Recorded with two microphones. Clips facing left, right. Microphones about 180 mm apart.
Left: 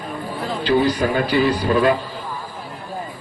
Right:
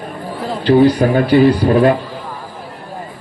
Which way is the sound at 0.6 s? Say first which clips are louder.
Right 7 dB; 55° right (ahead or behind).